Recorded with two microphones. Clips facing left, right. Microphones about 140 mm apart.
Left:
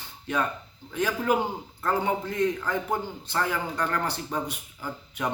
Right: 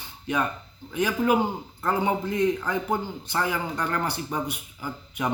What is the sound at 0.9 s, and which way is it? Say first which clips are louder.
Speech: right 3 dB; 15° right (ahead or behind).